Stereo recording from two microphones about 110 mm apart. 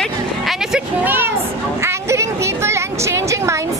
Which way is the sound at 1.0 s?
20° right (ahead or behind).